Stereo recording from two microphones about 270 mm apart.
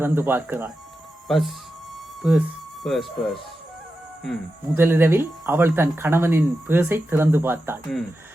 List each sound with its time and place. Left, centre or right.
0.0 s speech: centre